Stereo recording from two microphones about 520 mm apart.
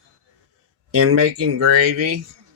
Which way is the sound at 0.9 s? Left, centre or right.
Right.